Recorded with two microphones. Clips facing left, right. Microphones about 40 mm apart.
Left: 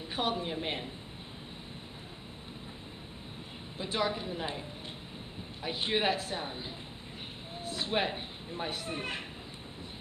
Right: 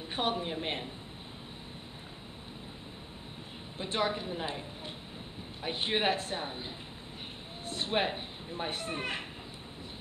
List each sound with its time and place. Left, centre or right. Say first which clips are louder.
0.1 s speech: even; centre
0.5 s speech: even; centre
3.7 s a woman's voice: even; centre
5.6 s a man's voice: even; centre
7.9 s a woman's voice: right 1 dB; centre